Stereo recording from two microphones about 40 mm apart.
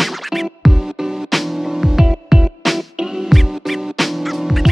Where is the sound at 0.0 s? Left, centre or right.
Centre.